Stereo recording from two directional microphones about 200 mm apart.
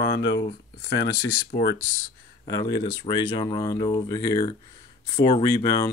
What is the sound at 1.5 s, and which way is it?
Speech, 55° left (ahead or behind).